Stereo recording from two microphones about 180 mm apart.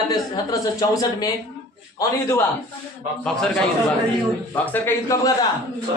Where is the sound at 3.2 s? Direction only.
5° left (ahead or behind).